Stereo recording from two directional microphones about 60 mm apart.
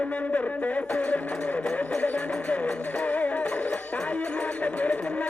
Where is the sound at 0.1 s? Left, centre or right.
Left.